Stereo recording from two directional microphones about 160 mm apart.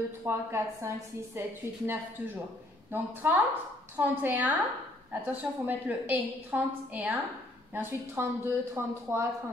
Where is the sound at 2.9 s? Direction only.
10° right (ahead or behind).